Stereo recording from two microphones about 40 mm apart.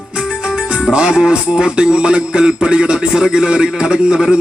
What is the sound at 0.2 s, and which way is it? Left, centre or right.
Music, right.